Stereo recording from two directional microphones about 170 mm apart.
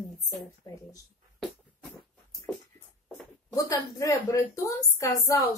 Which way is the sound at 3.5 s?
20° left (ahead or behind).